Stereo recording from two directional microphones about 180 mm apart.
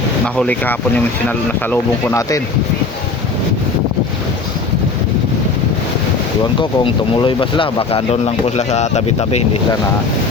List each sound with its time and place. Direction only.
0.3 s speech: 10° left (ahead or behind)
6.6 s speech: 30° left (ahead or behind)